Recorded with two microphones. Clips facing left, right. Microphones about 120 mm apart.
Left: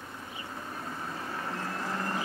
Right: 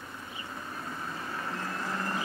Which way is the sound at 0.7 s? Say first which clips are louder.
Even; 35° left (ahead or behind).